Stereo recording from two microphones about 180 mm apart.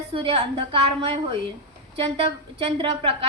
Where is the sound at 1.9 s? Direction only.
30° right (ahead or behind).